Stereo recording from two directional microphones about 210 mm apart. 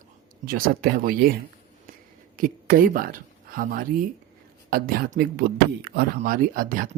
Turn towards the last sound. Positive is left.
turn(degrees=-40)  # may be behind; listen again after turning